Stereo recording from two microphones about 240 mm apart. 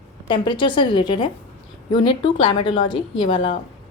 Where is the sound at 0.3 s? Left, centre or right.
Centre.